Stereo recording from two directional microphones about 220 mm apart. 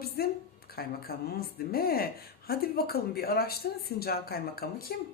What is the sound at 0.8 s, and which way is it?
A woman's voice, 45° left (ahead or behind).